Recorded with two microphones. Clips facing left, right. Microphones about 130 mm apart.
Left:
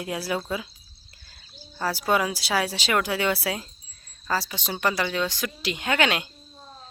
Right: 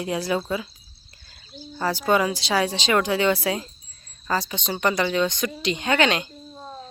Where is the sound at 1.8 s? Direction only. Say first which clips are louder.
Right 3 dB; 5° left (ahead or behind).